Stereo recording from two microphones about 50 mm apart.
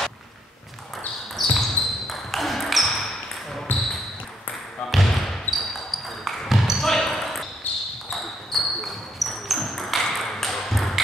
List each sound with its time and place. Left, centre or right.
1.3 s basketball bounce: centre
3.7 s basketball bounce: left
5.5 s basketball bounce: centre
7.7 s basketball bounce: left
8.1 s a sound: centre